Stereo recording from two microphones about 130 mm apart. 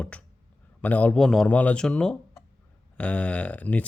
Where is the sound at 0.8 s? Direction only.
10° left (ahead or behind).